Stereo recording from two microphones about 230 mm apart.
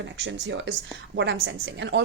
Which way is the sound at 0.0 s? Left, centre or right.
Right.